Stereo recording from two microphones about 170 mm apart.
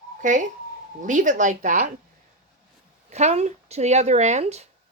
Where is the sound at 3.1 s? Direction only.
40° right (ahead or behind).